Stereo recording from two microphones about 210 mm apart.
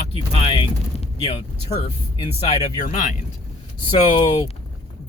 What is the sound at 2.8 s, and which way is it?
Speech, 35° left (ahead or behind).